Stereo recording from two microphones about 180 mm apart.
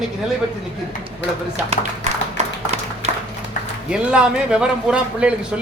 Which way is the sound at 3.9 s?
5° right (ahead or behind).